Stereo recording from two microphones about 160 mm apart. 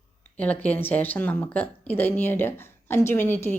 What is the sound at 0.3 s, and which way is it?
Speech, 10° left (ahead or behind).